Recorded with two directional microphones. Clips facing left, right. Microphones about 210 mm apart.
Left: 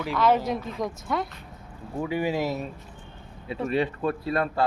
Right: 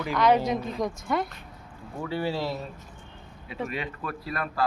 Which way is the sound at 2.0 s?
15° left (ahead or behind).